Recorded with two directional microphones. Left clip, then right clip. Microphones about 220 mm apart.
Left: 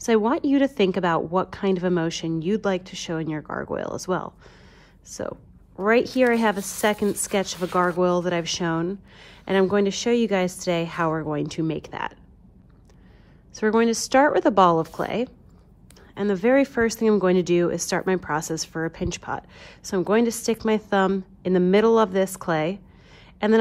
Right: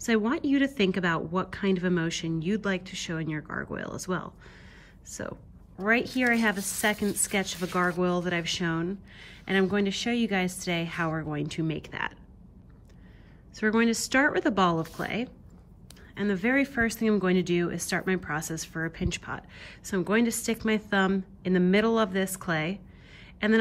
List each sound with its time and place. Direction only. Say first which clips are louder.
0.0 s a woman's voice: left 6 dB; 15° left (ahead or behind)
5.8 s a woman's voice: left 6 dB; 20° left (ahead or behind)
13.5 s a woman's voice: left 5 dB; 15° left (ahead or behind)